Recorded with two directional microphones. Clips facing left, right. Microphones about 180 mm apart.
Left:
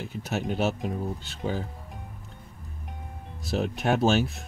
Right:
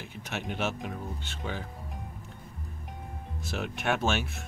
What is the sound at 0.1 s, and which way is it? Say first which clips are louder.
Speech: left 6 dB; 40° left (ahead or behind).